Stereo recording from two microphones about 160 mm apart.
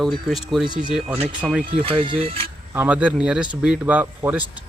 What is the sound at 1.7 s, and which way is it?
Speech, 35° right (ahead or behind).